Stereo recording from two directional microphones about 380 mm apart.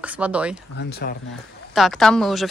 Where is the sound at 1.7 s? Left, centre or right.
Centre.